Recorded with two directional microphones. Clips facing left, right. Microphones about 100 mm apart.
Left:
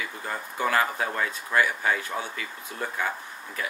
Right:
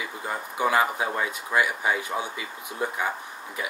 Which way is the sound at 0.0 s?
15° right (ahead or behind).